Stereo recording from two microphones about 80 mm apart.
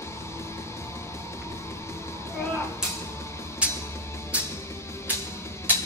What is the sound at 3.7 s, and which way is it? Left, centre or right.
Music, left.